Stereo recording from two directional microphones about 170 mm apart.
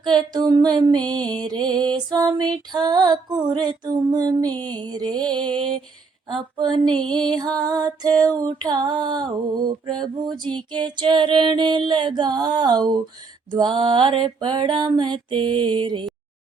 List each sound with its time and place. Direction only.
0.0 s female singing: 25° right (ahead or behind)
8.1 s music: 10° left (ahead or behind)
8.4 s female singing: 25° right (ahead or behind)